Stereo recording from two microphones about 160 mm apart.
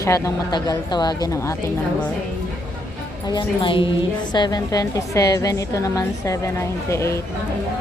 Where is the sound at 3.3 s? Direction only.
30° left (ahead or behind).